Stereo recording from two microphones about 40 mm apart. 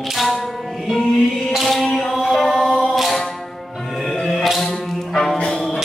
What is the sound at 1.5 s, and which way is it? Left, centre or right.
Chant, centre.